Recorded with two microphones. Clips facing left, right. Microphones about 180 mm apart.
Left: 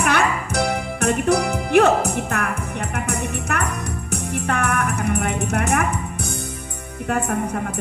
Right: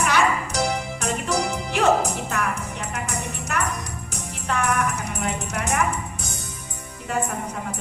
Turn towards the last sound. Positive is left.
turn(degrees=60)  # may be behind; listen again after turning